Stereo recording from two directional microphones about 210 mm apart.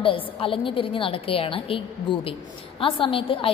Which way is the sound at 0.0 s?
25° left (ahead or behind).